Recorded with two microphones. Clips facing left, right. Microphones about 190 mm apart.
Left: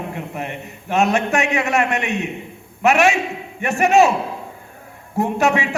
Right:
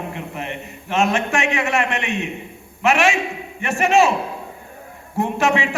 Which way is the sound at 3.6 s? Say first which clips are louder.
Left 3 dB; 40° left (ahead or behind).